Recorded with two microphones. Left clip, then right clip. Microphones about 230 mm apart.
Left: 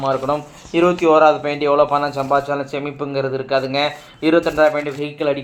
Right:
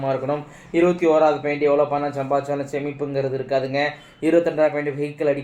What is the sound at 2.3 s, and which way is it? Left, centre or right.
Speech, left.